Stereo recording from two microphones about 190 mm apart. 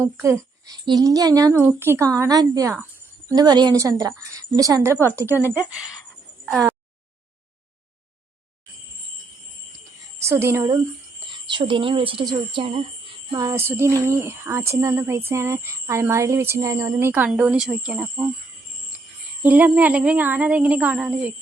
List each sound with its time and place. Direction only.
0.0 s a woman's voice: 15° right (ahead or behind)
6.4 s a sound: centre (ahead or behind)
10.2 s a woman's voice: 15° right (ahead or behind)
11.4 s speech: 25° right (ahead or behind)
13.3 s a woman's voice: 20° right (ahead or behind)
19.4 s a woman's voice: 10° right (ahead or behind)